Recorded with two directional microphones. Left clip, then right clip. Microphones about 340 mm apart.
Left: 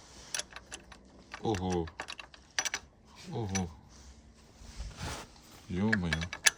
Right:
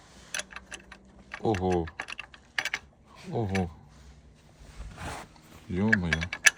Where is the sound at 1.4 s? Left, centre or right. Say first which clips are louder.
Right 6 dB; centre.